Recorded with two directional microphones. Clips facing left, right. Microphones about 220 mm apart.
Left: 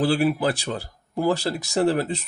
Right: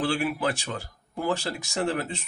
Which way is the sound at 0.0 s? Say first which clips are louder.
Left 6 dB; 35° left (ahead or behind).